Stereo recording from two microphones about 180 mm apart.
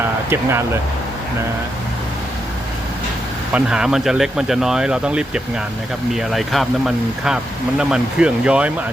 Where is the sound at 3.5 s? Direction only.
5° right (ahead or behind).